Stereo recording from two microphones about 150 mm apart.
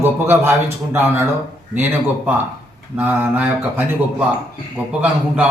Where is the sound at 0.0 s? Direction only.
15° right (ahead or behind).